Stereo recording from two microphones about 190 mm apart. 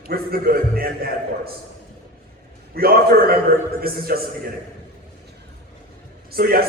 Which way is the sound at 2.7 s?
55° right (ahead or behind).